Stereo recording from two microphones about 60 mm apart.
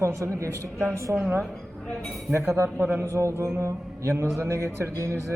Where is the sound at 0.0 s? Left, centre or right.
Right.